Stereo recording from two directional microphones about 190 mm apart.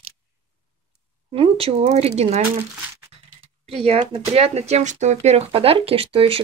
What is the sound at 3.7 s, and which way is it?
Speech, 30° right (ahead or behind).